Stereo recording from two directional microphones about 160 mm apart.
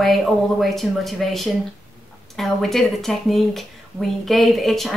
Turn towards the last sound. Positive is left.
turn(degrees=0)  # may be behind; listen again after turning